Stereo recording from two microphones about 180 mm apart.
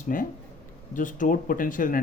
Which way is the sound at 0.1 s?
50° left (ahead or behind).